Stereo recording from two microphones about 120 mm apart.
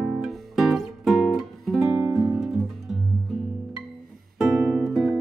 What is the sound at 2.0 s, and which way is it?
Music, 25° right (ahead or behind).